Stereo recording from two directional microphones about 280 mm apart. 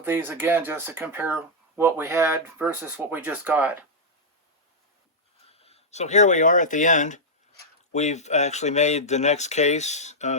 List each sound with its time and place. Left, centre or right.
0.0 s speech: centre
5.5 s speech: left